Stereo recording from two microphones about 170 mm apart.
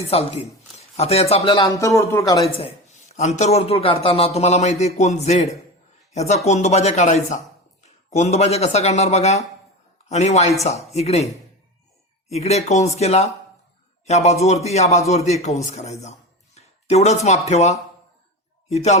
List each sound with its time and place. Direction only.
0.1 s speech: 35° left (ahead or behind)
1.7 s a man's voice: 20° left (ahead or behind)
2.6 s a man's voice: 35° left (ahead or behind)
12.3 s a man's voice: 40° left (ahead or behind)